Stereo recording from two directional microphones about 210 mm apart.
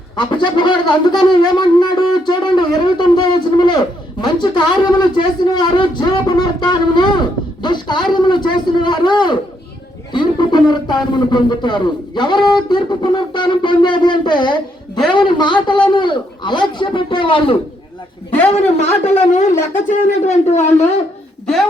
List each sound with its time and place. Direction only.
0.2 s a man's voice: 20° left (ahead or behind)
21.4 s speech: centre (ahead or behind)